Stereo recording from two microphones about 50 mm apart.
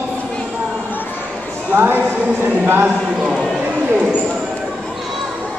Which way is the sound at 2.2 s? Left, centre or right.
Right.